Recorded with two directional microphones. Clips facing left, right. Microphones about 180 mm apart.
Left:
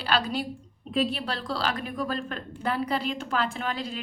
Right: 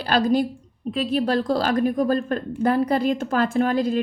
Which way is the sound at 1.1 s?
45° right (ahead or behind).